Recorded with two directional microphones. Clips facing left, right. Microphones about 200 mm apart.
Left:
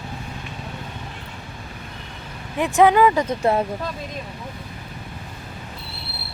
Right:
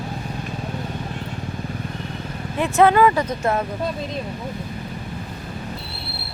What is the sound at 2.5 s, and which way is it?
Speech, 15° left (ahead or behind).